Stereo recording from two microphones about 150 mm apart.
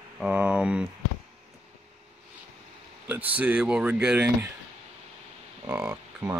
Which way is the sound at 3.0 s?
10° right (ahead or behind).